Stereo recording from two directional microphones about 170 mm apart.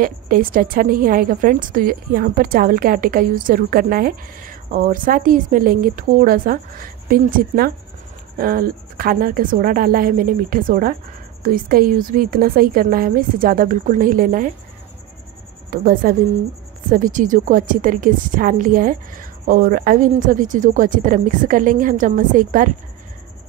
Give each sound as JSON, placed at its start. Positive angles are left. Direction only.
{"t": 0.0, "sound": "a woman's voice", "side_deg": -55}
{"t": 15.7, "sound": "a woman's voice", "side_deg": -60}